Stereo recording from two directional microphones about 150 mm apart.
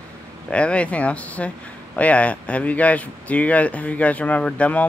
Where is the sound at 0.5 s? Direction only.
10° left (ahead or behind).